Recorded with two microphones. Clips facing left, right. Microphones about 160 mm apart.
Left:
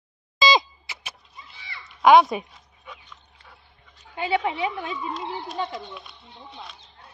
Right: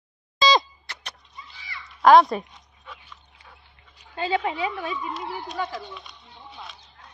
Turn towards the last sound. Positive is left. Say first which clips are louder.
# left 1 dB
turn(degrees=0)  # may be behind; listen again after turning